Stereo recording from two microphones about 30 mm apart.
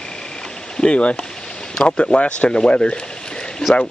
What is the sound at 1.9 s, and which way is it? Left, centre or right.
Speech, left.